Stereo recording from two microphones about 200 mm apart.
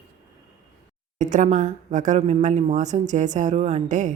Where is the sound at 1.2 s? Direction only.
40° right (ahead or behind).